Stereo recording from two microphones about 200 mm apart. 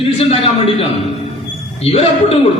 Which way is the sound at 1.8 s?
30° left (ahead or behind).